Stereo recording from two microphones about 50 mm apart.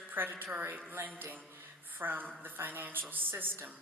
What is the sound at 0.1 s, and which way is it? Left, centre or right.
A woman's voice, right.